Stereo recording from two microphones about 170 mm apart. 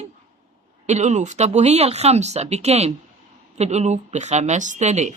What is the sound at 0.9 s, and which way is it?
Speech, 40° right (ahead or behind).